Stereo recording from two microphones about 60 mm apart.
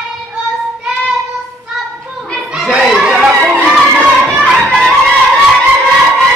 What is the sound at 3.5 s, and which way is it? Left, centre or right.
Music, centre.